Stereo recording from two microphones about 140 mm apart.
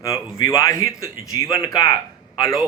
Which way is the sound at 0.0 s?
25° left (ahead or behind).